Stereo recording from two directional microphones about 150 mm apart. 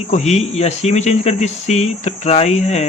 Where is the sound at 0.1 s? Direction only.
50° left (ahead or behind).